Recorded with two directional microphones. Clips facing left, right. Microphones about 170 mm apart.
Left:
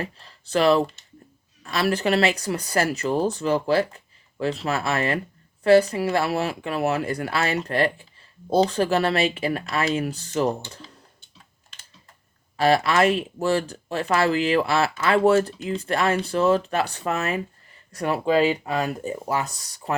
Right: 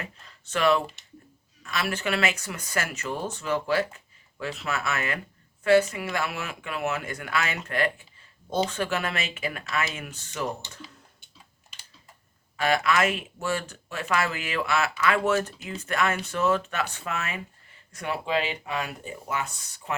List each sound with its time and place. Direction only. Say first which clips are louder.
0.0 s speech: left 8 dB; 35° left (ahead or behind)
12.5 s speech: left 5 dB; 35° left (ahead or behind)